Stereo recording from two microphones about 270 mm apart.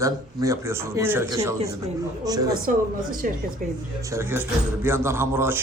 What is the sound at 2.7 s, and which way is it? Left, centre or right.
Speech, right.